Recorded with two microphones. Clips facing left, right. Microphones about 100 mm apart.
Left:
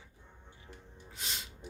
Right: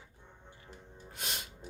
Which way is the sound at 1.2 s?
55° right (ahead or behind).